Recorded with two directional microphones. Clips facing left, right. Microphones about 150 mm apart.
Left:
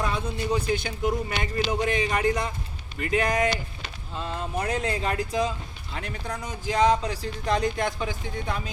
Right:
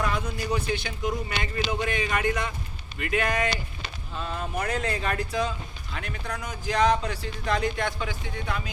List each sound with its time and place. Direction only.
0.0 s a man's voice: 30° left (ahead or behind)
0.7 s speech: 40° left (ahead or behind); by 7.1 s 20° left (ahead or behind)
7.1 s speech: 35° left (ahead or behind)
7.8 s speech: 20° left (ahead or behind)